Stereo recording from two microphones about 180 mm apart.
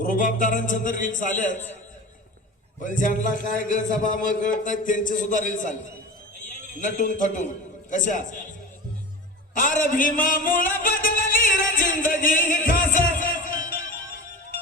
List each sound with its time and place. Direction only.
0.0 s a man's voice: 50° left (ahead or behind)
2.8 s a man's voice: 45° left (ahead or behind)
6.7 s a man's voice: 45° left (ahead or behind)
9.6 s music: 45° left (ahead or behind)